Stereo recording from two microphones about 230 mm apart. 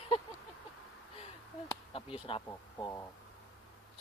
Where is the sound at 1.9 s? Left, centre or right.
Left.